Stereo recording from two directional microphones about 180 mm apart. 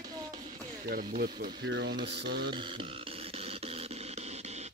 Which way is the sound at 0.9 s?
55° right (ahead or behind).